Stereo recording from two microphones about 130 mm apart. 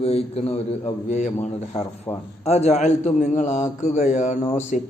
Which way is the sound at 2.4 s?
55° left (ahead or behind).